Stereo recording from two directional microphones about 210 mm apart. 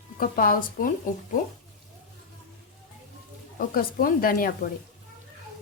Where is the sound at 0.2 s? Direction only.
45° left (ahead or behind).